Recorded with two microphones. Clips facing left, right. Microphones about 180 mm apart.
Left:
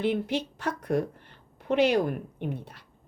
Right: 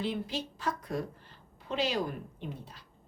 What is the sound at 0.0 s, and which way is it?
Speech, 65° left (ahead or behind).